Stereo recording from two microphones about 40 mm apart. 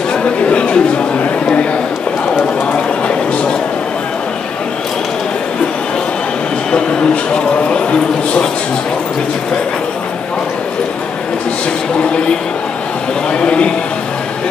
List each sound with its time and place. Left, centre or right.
0.1 s chatter: left
7.7 s a sound: left
13.3 s a man's voice: left